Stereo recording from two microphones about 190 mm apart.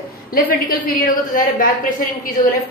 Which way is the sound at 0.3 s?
50° left (ahead or behind).